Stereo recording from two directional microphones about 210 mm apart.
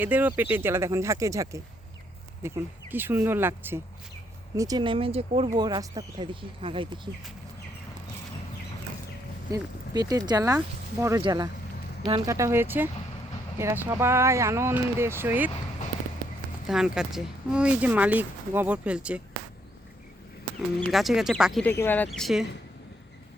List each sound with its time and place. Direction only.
0.0 s speech: 10° right (ahead or behind)
2.9 s speech: 10° right (ahead or behind)
9.5 s speech: 15° right (ahead or behind)
16.6 s speech: 5° right (ahead or behind)
20.8 s speech: centre (ahead or behind)